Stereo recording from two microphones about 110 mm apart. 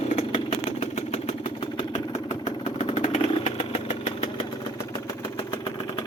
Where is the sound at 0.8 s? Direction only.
85° left.